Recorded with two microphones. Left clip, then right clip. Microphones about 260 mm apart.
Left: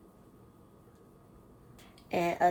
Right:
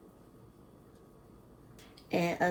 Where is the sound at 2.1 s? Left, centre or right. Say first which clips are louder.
Left 1 dB; left.